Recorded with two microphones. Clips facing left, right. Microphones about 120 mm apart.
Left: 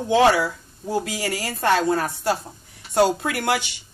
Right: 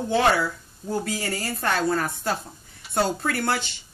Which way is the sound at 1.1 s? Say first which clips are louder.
Left 2 dB; 90° left.